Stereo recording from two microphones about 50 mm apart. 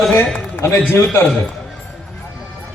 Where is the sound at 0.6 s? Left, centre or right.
Left.